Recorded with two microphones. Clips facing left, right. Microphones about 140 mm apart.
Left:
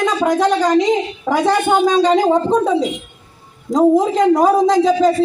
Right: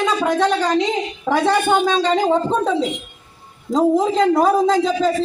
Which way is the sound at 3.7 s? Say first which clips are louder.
Left 3 dB; 15° left (ahead or behind).